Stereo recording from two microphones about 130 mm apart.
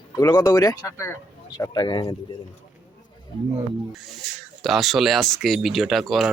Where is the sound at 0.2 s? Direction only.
30° left (ahead or behind).